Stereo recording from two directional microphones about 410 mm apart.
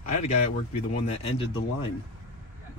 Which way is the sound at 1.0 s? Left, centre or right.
Centre.